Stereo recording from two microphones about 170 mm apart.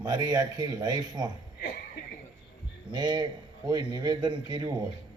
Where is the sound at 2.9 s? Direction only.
25° right (ahead or behind).